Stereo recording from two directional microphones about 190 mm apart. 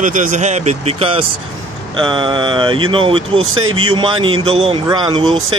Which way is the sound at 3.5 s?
90° right.